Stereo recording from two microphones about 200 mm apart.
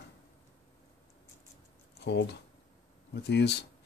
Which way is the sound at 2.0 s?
60° left (ahead or behind).